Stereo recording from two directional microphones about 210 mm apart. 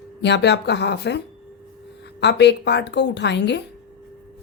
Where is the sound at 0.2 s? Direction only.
55° left (ahead or behind).